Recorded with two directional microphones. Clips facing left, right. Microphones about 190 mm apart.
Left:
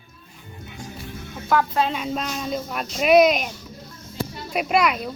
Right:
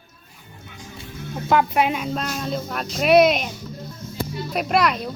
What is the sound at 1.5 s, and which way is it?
Speech, 20° right (ahead or behind).